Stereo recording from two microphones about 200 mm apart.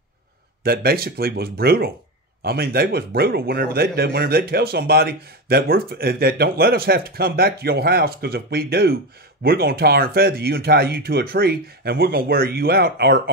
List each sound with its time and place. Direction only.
0.7 s speech: 50° right (ahead or behind)